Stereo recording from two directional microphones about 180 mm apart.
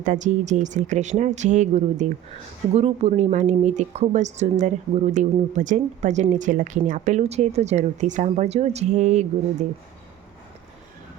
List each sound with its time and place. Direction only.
0.0 s speech: 45° right (ahead or behind)